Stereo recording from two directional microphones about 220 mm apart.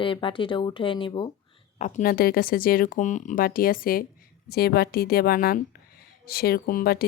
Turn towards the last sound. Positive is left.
turn(degrees=45)  # may be behind; listen again after turning